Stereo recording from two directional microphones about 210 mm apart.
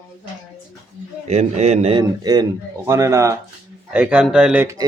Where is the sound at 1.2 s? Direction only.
30° right (ahead or behind).